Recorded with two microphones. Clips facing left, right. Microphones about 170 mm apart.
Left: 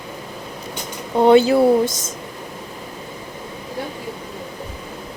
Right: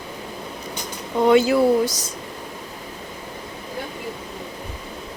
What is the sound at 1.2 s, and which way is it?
Speech, 30° left (ahead or behind).